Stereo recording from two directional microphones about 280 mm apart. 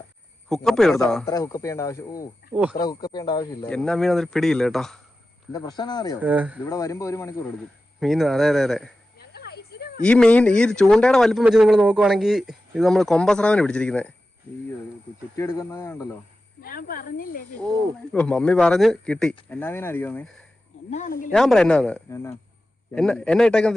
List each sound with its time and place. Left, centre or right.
0.4 s a man's voice: centre
2.5 s speech: centre
2.8 s speech: centre
5.5 s a man's voice: centre
6.1 s speech: centre
6.7 s a man's voice: centre
9.1 s a sound: left
10.0 s speech: centre
15.4 s a man's voice: centre
16.6 s speech: left
18.1 s a man's voice: centre
20.9 s speech: left
21.2 s speech: centre